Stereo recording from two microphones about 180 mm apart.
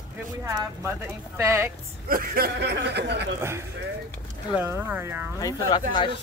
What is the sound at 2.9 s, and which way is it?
Speech, 70° right (ahead or behind).